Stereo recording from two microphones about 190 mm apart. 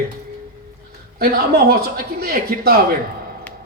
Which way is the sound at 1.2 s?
50° right (ahead or behind).